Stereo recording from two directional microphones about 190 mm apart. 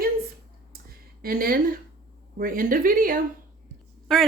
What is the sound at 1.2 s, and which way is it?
Speech, 50° right (ahead or behind).